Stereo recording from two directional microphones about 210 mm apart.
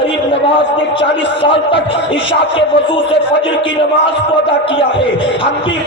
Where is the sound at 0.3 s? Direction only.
25° left (ahead or behind).